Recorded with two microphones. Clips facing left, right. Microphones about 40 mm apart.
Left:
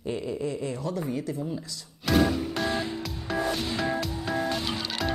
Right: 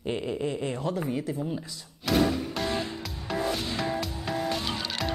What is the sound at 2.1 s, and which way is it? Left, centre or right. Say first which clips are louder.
Music: left 1 dB; centre.